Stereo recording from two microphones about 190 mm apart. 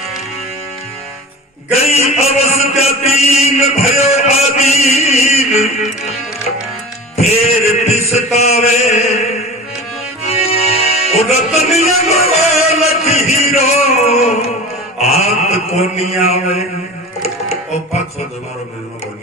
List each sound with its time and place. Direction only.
1.7 s mantra: 35° left (ahead or behind)
7.2 s chant: 35° left (ahead or behind)
10.2 s music: 35° left (ahead or behind)
14.9 s mantra: 35° left (ahead or behind)